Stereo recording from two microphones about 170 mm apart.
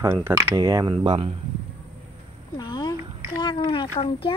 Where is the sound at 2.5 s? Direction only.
25° left (ahead or behind).